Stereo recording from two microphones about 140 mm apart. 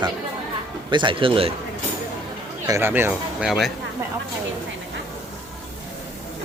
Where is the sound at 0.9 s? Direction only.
35° right (ahead or behind).